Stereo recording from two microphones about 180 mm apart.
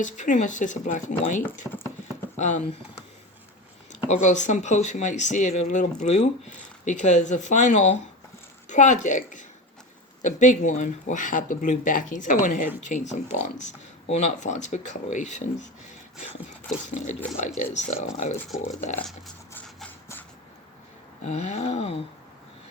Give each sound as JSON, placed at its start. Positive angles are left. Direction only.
{"t": 0.0, "sound": "speech", "side_deg": 45}
{"t": 1.7, "sound": "speech", "side_deg": 5}
{"t": 2.3, "sound": "speech", "side_deg": 40}
{"t": 4.1, "sound": "speech", "side_deg": 40}
{"t": 16.7, "sound": "speech", "side_deg": 5}
{"t": 17.6, "sound": "speech", "side_deg": 40}
{"t": 19.5, "sound": "a sound", "side_deg": 5}
{"t": 21.2, "sound": "speech", "side_deg": 40}